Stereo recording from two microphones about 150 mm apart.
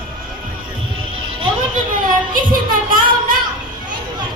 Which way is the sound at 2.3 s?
70° right (ahead or behind).